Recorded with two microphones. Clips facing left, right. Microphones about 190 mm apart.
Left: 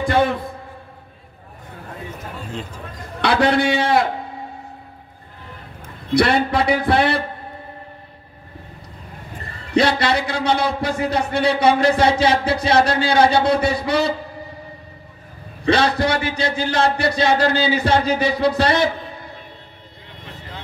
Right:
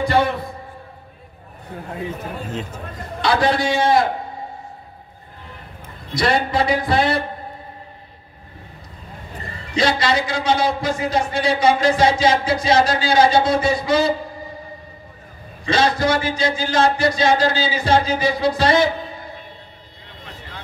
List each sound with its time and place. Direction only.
0.0 s a man's voice: 50° left (ahead or behind)
3.2 s a man's voice: 60° left (ahead or behind)
5.8 s a man's voice: 60° left (ahead or behind)
9.8 s a man's voice: 60° left (ahead or behind)
15.6 s a man's voice: 60° left (ahead or behind)